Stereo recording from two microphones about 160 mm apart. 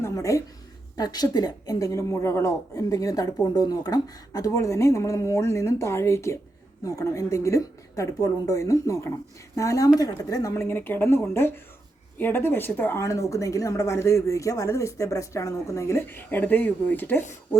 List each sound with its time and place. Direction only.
0.0 s a woman's voice: 20° left (ahead or behind)